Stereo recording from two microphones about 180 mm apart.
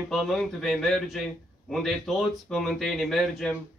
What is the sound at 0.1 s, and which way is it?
A man's voice, centre (ahead or behind).